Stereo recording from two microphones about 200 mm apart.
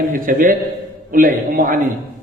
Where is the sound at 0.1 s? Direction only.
40° right (ahead or behind).